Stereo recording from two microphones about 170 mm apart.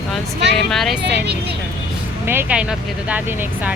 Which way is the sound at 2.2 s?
10° right (ahead or behind).